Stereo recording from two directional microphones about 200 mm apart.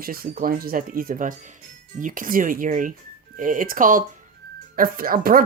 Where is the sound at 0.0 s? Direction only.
45° right (ahead or behind).